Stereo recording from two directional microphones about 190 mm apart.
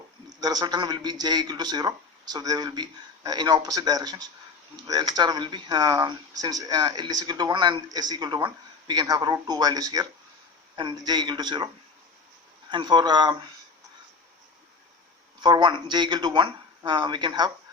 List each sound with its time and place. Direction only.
0.3 s speech: 20° right (ahead or behind)
12.7 s speech: 25° right (ahead or behind)
15.4 s speech: 25° right (ahead or behind)